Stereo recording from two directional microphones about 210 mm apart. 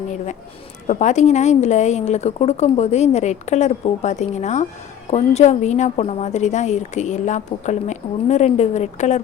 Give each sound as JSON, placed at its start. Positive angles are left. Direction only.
{"t": 0.9, "sound": "a woman's voice", "side_deg": 35}